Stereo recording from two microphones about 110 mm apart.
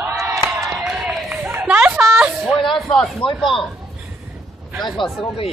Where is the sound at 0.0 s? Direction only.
30° right (ahead or behind).